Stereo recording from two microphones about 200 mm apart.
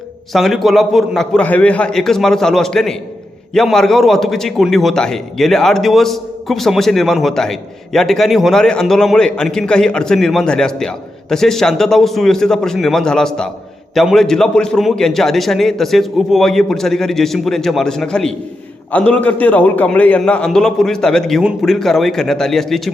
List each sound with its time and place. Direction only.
0.3 s a man's voice: centre (ahead or behind)